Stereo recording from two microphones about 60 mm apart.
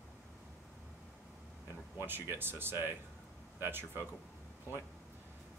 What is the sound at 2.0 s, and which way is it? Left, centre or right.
Speech, right.